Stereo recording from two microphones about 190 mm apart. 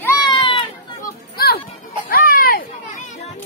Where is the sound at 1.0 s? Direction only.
55° left (ahead or behind).